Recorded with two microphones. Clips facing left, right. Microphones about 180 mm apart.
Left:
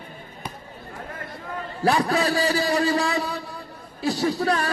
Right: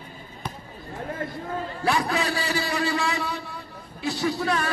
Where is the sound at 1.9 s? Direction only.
35° left (ahead or behind).